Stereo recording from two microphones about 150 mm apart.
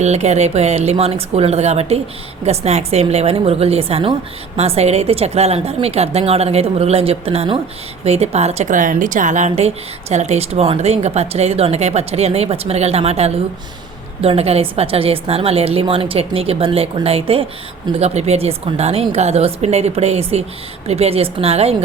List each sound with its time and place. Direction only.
0.0 s a woman's voice: 45° right (ahead or behind)